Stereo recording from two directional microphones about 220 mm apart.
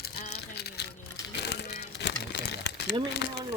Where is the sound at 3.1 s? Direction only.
50° left (ahead or behind).